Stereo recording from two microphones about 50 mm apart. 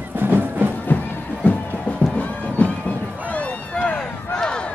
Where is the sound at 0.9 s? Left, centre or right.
Left.